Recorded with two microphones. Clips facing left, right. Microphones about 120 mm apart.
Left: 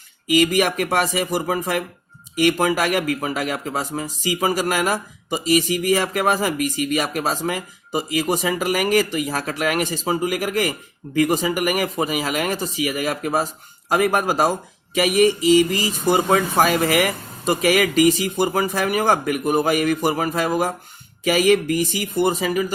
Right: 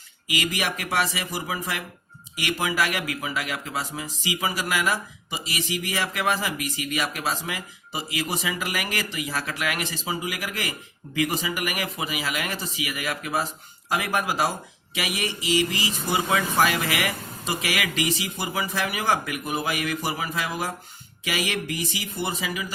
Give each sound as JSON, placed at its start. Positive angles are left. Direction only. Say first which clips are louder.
{"t": 0.3, "sound": "speech", "louder": "left 10 dB", "side_deg": 50}